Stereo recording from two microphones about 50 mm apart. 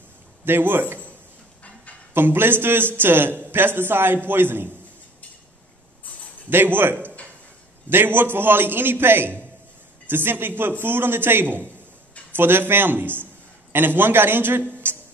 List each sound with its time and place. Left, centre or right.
0.5 s a man's voice: right
2.1 s a man's voice: right
6.5 s a man's voice: right
14.8 s music: right